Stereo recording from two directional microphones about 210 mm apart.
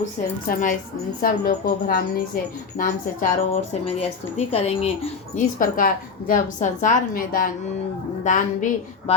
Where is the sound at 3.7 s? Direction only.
30° left (ahead or behind).